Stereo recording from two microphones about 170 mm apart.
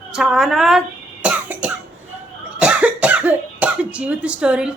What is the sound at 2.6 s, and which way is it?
Cough, 10° right (ahead or behind).